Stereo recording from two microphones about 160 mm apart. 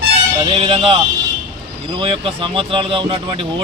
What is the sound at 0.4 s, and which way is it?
Speech, 35° right (ahead or behind).